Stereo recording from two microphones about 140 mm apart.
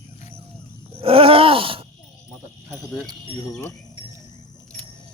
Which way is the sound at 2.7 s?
Centre (ahead or behind).